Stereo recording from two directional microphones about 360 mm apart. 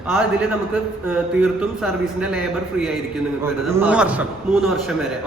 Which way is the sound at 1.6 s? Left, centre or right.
Centre.